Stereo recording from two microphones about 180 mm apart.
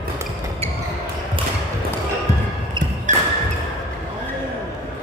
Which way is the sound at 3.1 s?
45° right (ahead or behind).